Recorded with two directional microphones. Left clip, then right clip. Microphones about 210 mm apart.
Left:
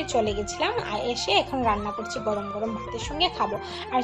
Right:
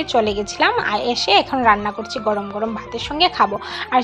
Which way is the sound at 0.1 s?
15° right (ahead or behind).